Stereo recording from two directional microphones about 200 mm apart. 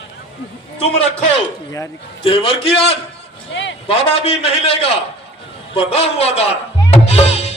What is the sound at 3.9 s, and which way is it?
A man's voice, 30° left (ahead or behind).